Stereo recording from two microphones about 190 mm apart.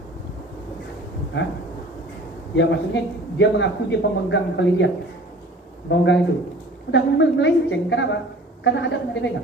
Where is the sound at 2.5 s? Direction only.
70° left (ahead or behind).